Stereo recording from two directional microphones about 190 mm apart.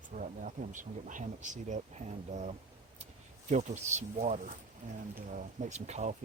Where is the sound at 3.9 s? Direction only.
40° right (ahead or behind).